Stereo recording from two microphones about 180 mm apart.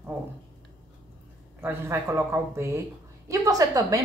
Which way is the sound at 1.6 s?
15° right (ahead or behind).